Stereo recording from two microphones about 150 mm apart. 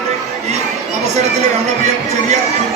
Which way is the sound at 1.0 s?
50° right (ahead or behind).